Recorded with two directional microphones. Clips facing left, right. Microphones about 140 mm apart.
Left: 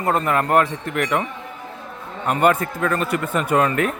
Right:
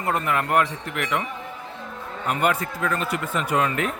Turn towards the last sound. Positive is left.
turn(degrees=50)  # may be behind; listen again after turning